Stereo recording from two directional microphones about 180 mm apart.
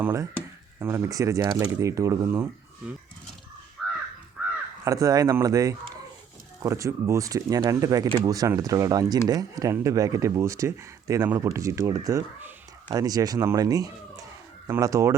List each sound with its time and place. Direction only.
0.0 s speech: 15° right (ahead or behind)
3.8 s crow: centre (ahead or behind)
4.9 s speech: 20° right (ahead or behind)